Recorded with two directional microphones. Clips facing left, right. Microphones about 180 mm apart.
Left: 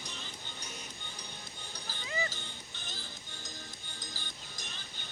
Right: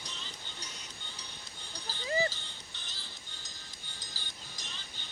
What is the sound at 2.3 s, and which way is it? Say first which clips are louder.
Music: left 4 dB; 50° left (ahead or behind).